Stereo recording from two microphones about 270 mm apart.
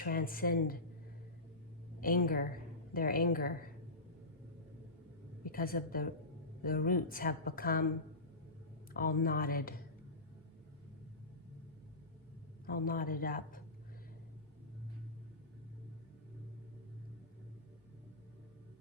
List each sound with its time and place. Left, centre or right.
0.0 s a woman's voice: left
2.0 s a woman's voice: left
5.4 s a woman's voice: left
8.9 s a woman's voice: left
12.6 s a woman's voice: left